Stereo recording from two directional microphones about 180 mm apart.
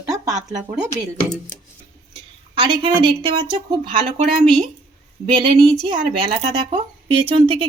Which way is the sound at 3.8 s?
55° right (ahead or behind).